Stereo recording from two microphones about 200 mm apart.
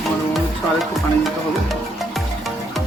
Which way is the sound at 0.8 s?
Centre (ahead or behind).